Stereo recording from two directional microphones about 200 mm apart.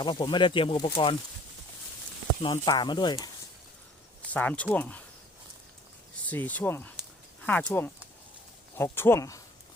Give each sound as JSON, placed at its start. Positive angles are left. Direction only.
{"t": 0.0, "sound": "speech", "side_deg": 25}
{"t": 2.4, "sound": "speech", "side_deg": 25}
{"t": 4.3, "sound": "speech", "side_deg": 10}
{"t": 6.2, "sound": "speech", "side_deg": 10}